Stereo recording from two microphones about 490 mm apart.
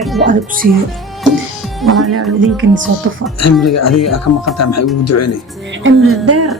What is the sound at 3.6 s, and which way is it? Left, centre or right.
Speech, left.